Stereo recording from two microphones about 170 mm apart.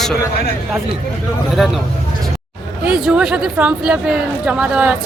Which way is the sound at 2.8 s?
5° right (ahead or behind).